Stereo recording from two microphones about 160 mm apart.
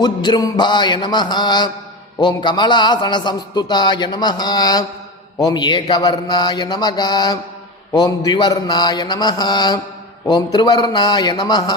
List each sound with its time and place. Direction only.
0.0 s a man's voice: 25° left (ahead or behind)